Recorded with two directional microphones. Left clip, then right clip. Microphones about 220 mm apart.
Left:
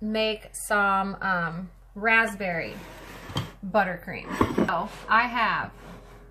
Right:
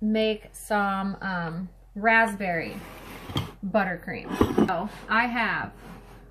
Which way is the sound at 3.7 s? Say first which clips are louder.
Left 1 dB; 10° left (ahead or behind).